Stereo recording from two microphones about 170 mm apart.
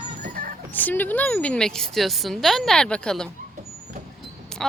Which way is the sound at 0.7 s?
10° left (ahead or behind).